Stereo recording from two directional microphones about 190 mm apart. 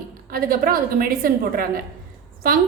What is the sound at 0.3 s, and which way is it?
A woman's voice, 50° right (ahead or behind).